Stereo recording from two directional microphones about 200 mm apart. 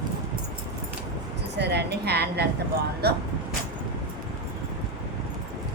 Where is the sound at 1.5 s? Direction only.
55° right (ahead or behind).